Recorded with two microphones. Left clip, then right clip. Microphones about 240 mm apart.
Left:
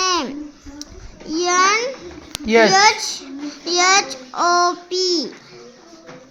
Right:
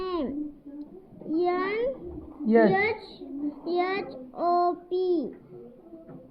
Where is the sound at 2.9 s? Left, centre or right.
Left.